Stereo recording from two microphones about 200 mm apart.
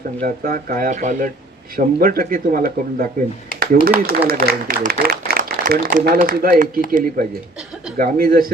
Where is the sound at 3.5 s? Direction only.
45° right (ahead or behind).